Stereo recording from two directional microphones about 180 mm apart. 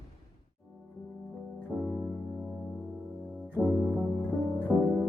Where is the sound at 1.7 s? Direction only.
10° right (ahead or behind).